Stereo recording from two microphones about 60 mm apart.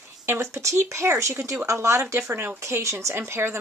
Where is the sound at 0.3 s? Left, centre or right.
Right.